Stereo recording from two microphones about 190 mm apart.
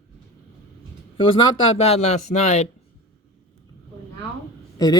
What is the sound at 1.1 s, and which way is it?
Speech, 25° left (ahead or behind).